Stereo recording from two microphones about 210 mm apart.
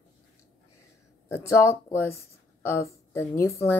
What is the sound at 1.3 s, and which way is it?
A woman's voice, 15° left (ahead or behind).